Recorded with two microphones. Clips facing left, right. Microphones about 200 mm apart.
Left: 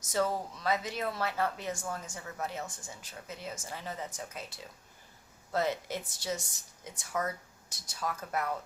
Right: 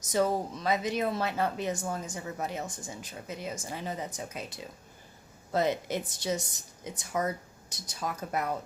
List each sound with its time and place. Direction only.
0.0 s speech: 15° right (ahead or behind)